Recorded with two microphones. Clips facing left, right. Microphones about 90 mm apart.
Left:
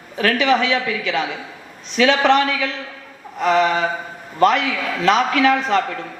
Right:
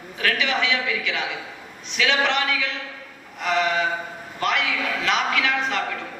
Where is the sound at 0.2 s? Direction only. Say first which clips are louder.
Left 7 dB; 40° left (ahead or behind).